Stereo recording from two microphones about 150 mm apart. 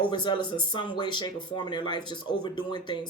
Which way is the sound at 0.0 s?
30° left (ahead or behind).